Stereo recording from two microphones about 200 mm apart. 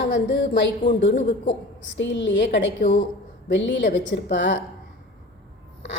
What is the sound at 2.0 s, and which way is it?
A woman's voice, 65° left (ahead or behind).